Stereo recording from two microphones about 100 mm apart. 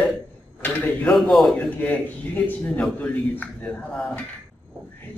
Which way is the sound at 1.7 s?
15° left (ahead or behind).